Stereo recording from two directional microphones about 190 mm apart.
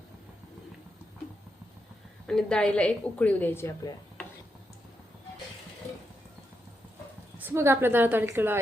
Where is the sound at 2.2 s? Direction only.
5° left (ahead or behind).